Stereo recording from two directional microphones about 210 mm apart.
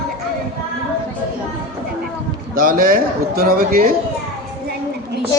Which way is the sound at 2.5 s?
45° right (ahead or behind).